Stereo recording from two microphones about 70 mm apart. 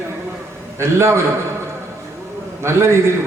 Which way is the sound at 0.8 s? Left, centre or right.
Right.